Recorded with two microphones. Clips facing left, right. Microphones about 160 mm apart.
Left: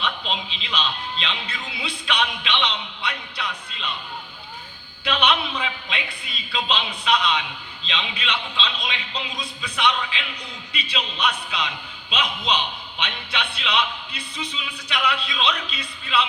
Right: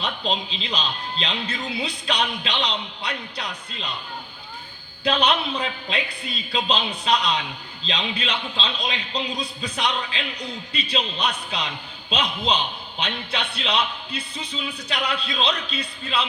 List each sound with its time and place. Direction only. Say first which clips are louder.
0.0 s a man's voice: right 2 dB; 35° right (ahead or behind)
5.0 s a man's voice: right 1 dB; 40° right (ahead or behind)
13.6 s a man's voice: even; 35° right (ahead or behind)